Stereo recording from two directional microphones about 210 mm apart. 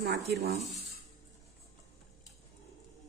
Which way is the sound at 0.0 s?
55° right (ahead or behind).